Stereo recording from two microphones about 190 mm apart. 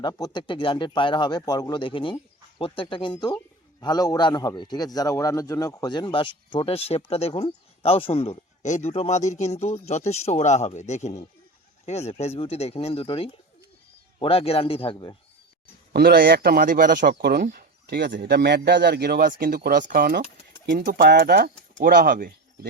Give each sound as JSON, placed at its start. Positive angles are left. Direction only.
{"t": 0.0, "sound": "a man's voice", "side_deg": 20}
{"t": 15.9, "sound": "speech", "side_deg": -55}